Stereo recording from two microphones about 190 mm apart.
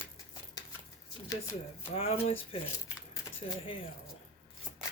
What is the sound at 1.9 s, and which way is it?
Speech, 30° left (ahead or behind).